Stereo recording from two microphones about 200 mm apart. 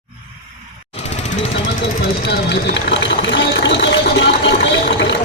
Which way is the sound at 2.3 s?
60° left (ahead or behind).